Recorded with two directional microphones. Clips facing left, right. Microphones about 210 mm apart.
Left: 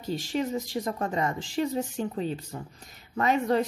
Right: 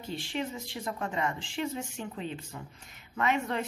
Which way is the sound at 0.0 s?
40° left (ahead or behind).